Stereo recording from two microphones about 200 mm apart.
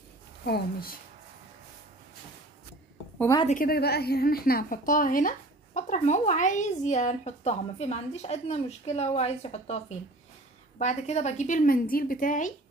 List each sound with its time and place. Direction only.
0.5 s a woman's voice: 50° left (ahead or behind)
3.5 s a woman's voice: 50° left (ahead or behind)